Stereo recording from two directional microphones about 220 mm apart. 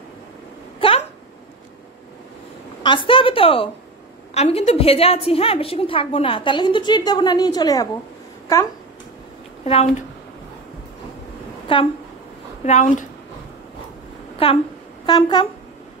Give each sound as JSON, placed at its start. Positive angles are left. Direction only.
{"t": 0.7, "sound": "a sound", "side_deg": 25}
{"t": 2.8, "sound": "a woman's voice", "side_deg": 20}
{"t": 9.7, "sound": "a woman's voice", "side_deg": 30}
{"t": 11.6, "sound": "a sound", "side_deg": 25}
{"t": 12.6, "sound": "speech", "side_deg": 35}
{"t": 14.4, "sound": "a woman's voice", "side_deg": 25}